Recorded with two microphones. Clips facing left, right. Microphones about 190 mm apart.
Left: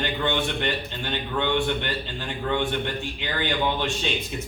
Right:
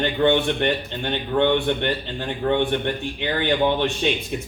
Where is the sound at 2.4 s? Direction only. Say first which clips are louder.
Right 5 dB; 55° right (ahead or behind).